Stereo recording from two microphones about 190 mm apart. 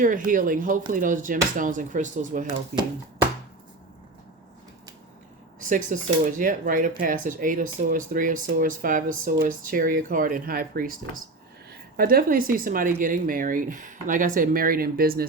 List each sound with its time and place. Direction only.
0.0 s speech: 45° right (ahead or behind)
5.5 s a woman's voice: 45° right (ahead or behind)